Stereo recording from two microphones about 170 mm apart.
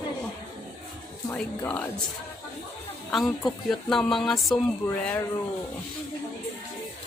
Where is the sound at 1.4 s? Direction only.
10° left (ahead or behind).